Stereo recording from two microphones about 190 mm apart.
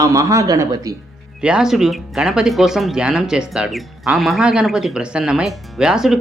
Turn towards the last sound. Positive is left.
turn(degrees=-5)  # may be behind; listen again after turning